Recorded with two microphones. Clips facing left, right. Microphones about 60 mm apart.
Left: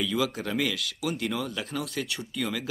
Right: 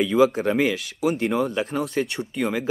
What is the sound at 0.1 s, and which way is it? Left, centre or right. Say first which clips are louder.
Speech: right 10 dB; right.